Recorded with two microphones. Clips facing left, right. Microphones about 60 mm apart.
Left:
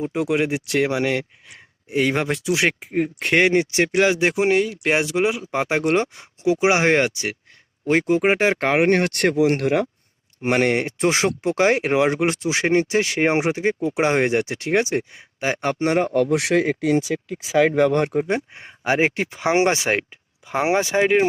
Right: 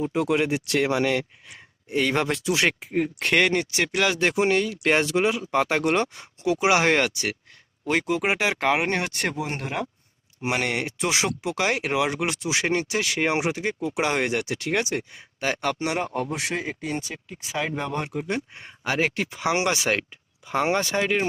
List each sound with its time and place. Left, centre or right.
0.0 s speech: centre
3.3 s speech: left
4.3 s speech: centre; by 9.3 s left
9.4 s speech: left
10.4 s speech: left
16.1 s speech: left
18.1 s speech: left
20.5 s speech: centre